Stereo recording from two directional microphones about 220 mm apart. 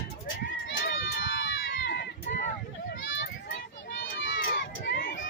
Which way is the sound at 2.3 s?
35° left (ahead or behind).